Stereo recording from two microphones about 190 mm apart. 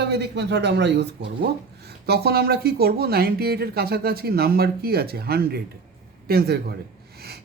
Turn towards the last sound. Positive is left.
turn(degrees=-55)  # may be behind; listen again after turning